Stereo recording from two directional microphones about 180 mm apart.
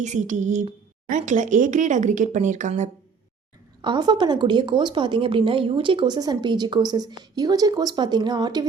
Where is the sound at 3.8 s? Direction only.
25° right (ahead or behind).